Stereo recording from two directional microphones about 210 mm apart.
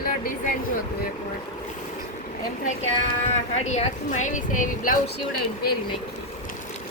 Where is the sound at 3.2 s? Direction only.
35° left (ahead or behind).